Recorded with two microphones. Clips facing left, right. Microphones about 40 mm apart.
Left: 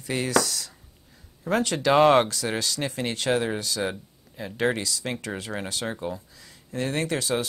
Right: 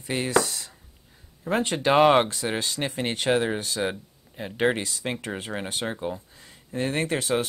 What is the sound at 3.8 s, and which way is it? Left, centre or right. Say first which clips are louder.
Speech: right 1 dB; right.